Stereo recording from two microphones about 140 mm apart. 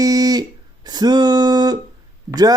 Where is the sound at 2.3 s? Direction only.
25° right (ahead or behind).